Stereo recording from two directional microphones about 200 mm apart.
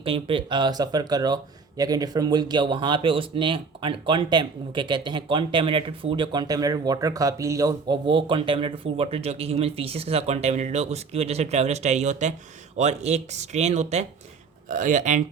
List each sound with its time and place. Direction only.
0.0 s speech: 25° right (ahead or behind)